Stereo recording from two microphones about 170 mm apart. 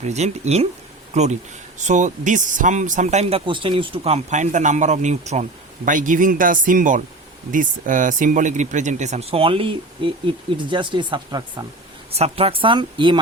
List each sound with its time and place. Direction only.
0.0 s speech: 40° right (ahead or behind); by 11.6 s 25° right (ahead or behind)
12.1 s speech: 35° right (ahead or behind)